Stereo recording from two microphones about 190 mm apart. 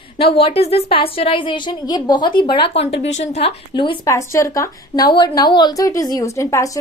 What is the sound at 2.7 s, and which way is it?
Speech, 70° left (ahead or behind).